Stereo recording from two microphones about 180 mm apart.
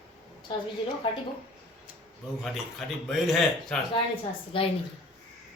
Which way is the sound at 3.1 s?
Centre (ahead or behind).